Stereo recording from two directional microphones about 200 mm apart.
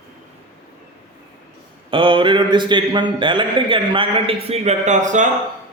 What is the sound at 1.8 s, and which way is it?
A man's voice, 25° right (ahead or behind).